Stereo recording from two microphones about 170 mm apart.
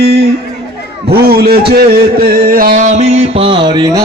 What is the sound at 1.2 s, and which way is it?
Speech, 65° right (ahead or behind).